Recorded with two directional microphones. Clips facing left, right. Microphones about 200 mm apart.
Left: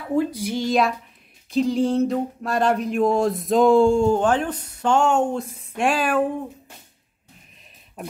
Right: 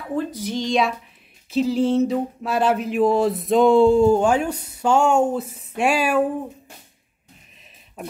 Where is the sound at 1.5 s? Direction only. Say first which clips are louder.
Right 1 dB; 5° right (ahead or behind).